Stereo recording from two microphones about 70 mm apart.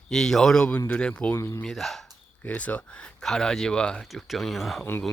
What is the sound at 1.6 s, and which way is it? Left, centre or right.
Speech, centre.